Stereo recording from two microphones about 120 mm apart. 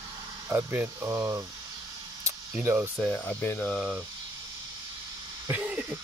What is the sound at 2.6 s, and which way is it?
Speech, 20° right (ahead or behind).